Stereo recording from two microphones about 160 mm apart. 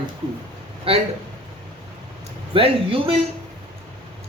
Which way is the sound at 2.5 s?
35° right (ahead or behind).